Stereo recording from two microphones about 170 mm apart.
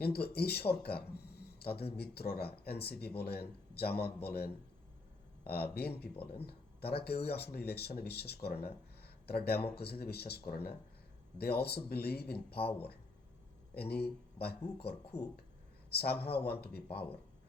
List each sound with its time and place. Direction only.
0.0 s speech: 65° left (ahead or behind)
13.7 s speech: 70° left (ahead or behind)
15.9 s speech: 65° left (ahead or behind)